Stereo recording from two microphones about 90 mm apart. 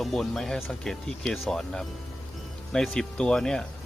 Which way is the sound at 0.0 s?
5° left (ahead or behind).